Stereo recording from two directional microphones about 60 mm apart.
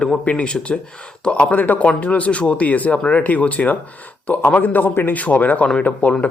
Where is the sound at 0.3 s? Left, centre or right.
Centre.